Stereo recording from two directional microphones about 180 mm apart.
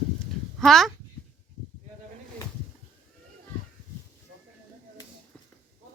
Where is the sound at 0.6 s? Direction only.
Centre (ahead or behind).